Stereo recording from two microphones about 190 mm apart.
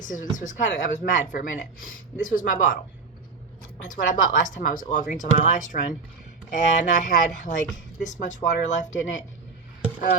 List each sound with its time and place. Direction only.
0.0 s speech: 45° left (ahead or behind)
3.8 s speech: 40° left (ahead or behind)